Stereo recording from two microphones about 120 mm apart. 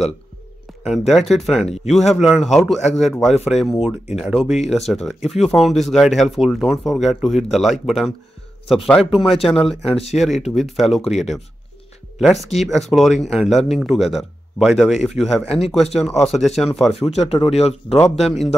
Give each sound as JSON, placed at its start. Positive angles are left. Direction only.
{"t": 0.8, "sound": "speech", "side_deg": 0}
{"t": 15.4, "sound": "speech", "side_deg": 55}
{"t": 15.8, "sound": "speech", "side_deg": 5}
{"t": 17.3, "sound": "speech", "side_deg": 55}
{"t": 18.2, "sound": "speech", "side_deg": 0}